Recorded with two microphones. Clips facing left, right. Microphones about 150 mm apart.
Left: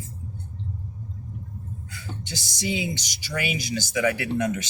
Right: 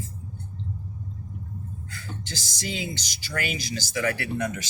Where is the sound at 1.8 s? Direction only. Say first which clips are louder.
Even; 15° left (ahead or behind).